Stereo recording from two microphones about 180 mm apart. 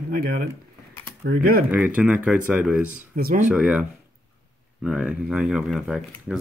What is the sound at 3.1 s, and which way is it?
Speech, 50° right (ahead or behind).